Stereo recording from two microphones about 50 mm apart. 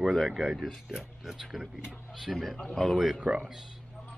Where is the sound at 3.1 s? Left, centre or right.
Centre.